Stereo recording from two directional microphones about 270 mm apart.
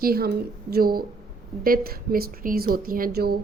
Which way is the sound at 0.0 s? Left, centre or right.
Right.